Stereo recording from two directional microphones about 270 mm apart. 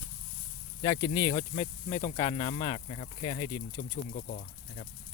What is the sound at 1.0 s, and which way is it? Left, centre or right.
Speech, centre.